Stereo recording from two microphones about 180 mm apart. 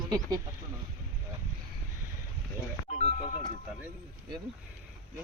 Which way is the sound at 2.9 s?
35° left (ahead or behind).